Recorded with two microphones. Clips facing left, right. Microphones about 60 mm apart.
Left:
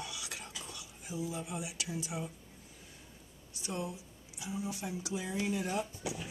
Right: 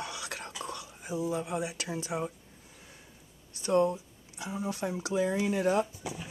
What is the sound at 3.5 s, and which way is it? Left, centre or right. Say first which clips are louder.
Speech: right 13 dB; right.